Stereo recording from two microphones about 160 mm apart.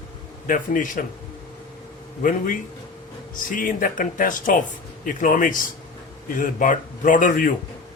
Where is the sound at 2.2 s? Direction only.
55° left (ahead or behind).